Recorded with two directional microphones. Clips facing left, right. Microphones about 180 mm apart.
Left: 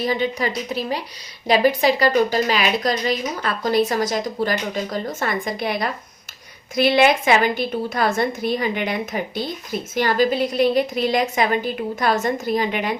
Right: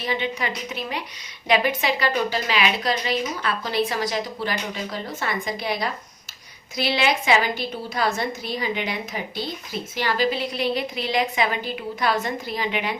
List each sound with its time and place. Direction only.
0.0 s a woman's voice: 40° left (ahead or behind)